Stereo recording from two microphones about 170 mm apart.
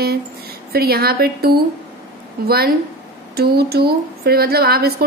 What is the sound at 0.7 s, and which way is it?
A woman's voice, 65° right (ahead or behind).